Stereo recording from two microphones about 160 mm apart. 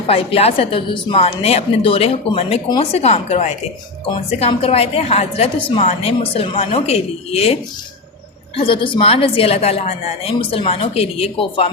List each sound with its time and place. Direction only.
0.1 s a woman's voice: 35° left (ahead or behind)